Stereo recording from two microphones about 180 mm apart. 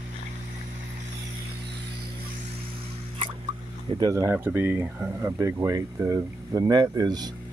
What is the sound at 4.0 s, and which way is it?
Speech, 20° right (ahead or behind).